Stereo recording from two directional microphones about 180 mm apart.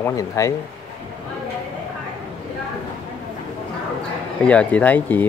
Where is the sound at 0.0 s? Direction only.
15° left (ahead or behind).